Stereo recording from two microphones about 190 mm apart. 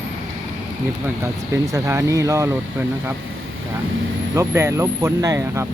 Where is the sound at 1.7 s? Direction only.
15° right (ahead or behind).